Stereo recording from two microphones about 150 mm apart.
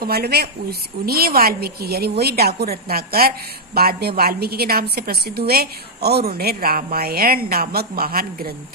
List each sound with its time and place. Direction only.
0.0 s a woman's voice: 90° right